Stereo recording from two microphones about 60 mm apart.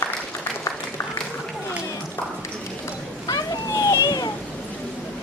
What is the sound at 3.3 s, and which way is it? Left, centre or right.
Children playing, left.